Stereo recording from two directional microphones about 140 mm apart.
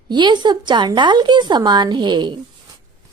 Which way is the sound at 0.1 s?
30° right (ahead or behind).